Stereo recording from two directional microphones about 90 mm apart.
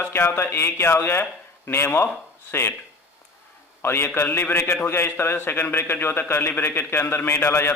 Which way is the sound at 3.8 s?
25° left (ahead or behind).